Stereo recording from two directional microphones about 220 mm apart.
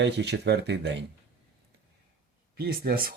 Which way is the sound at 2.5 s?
45° right (ahead or behind).